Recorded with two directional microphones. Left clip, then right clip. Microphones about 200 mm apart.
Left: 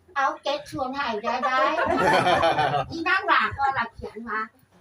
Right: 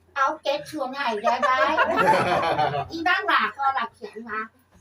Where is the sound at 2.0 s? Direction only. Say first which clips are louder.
Left 3 dB; 25° left (ahead or behind).